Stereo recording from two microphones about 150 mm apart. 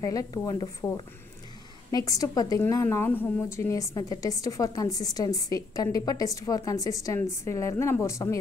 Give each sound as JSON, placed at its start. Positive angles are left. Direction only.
{"t": 0.0, "sound": "a woman's voice", "side_deg": 20}
{"t": 1.9, "sound": "a woman's voice", "side_deg": 25}